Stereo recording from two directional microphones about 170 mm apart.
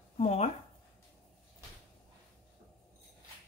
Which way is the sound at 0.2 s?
40° left (ahead or behind).